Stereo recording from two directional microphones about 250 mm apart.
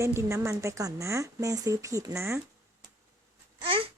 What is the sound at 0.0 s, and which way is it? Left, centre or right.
A woman's voice, centre.